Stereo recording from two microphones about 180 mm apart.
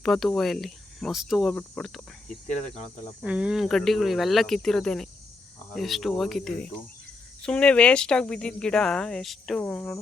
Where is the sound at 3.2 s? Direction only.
5° right (ahead or behind).